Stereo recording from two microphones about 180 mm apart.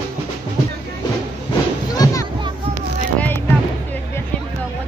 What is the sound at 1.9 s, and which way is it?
Music, 20° left (ahead or behind).